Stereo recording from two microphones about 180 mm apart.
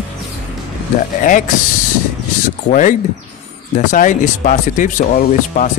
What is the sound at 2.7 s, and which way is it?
Speech, 45° left (ahead or behind).